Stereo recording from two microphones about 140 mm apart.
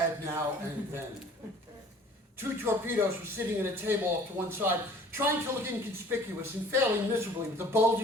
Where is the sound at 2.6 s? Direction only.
15° right (ahead or behind).